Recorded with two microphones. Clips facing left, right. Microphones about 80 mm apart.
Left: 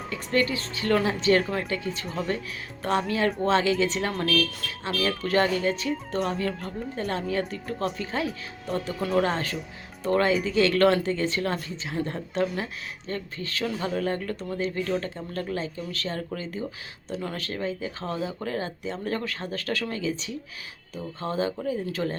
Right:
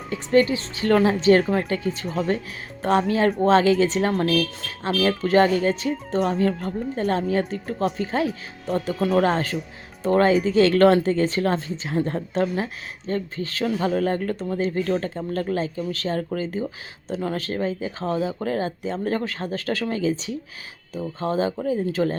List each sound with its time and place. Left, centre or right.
0.1 s speech: right